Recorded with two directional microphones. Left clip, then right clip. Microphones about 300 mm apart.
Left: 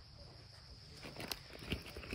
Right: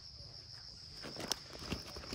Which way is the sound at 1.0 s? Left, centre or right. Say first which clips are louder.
Right 4 dB; right.